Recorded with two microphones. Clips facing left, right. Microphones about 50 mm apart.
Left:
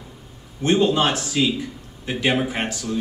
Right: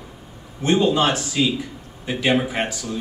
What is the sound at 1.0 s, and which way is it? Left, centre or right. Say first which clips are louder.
Speech: right 1 dB; right.